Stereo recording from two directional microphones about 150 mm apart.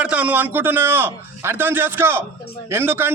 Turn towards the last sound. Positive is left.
turn(degrees=-15)  # may be behind; listen again after turning